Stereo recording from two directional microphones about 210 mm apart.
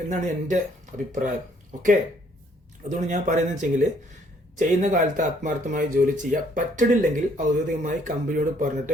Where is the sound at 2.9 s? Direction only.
35° right (ahead or behind).